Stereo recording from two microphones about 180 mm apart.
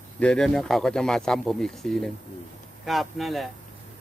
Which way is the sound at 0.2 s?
5° left (ahead or behind).